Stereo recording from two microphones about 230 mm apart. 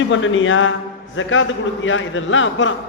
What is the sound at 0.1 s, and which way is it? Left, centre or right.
A man's voice, left.